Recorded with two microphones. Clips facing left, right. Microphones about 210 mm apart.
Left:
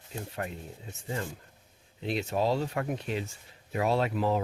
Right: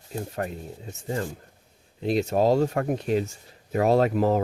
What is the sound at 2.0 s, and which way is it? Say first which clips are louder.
Speech: right 7 dB; 40° right (ahead or behind).